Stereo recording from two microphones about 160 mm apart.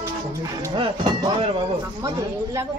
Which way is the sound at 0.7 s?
30° right (ahead or behind).